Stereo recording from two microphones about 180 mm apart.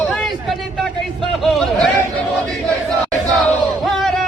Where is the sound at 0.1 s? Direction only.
Centre (ahead or behind).